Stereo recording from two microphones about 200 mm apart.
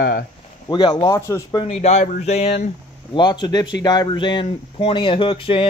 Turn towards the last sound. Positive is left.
turn(degrees=25)  # may be behind; listen again after turning